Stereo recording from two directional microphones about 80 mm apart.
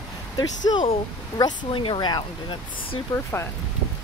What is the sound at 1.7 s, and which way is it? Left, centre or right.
Speech, left.